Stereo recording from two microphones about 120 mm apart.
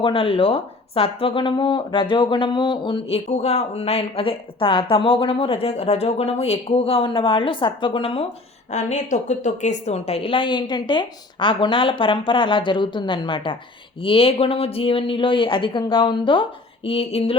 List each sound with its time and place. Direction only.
0.0 s speech: 50° left (ahead or behind)
3.2 s speech: 65° left (ahead or behind)
8.7 s speech: 75° left (ahead or behind); by 17.3 s 55° left (ahead or behind)